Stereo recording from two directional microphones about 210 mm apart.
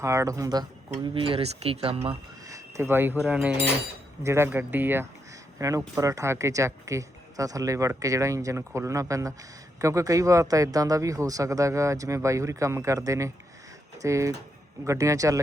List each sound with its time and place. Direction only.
0.0 s speech: 15° right (ahead or behind)
2.5 s speech: 15° right (ahead or behind)